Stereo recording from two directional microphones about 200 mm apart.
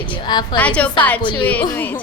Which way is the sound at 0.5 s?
5° left (ahead or behind).